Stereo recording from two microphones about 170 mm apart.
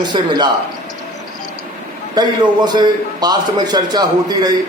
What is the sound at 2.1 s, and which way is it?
A man's voice, 25° right (ahead or behind).